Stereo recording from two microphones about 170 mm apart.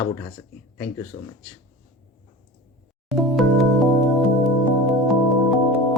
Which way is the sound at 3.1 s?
Centre (ahead or behind).